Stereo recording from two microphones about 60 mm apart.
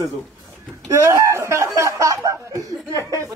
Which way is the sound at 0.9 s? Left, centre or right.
Right.